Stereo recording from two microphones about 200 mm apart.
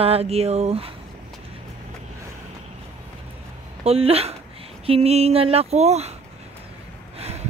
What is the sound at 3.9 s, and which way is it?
Speech, 30° right (ahead or behind).